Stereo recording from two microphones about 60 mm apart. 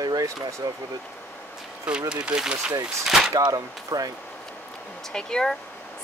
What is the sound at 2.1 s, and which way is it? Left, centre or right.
Speech, centre.